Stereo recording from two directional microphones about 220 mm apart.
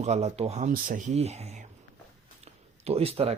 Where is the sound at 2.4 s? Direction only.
25° right (ahead or behind).